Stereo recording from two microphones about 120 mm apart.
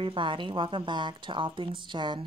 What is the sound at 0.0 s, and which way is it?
Speech, 45° right (ahead or behind).